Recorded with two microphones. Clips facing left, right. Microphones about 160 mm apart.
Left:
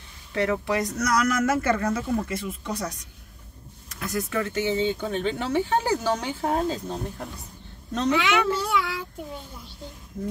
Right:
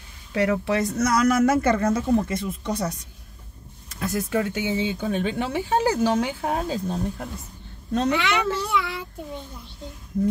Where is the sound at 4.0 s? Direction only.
25° right (ahead or behind).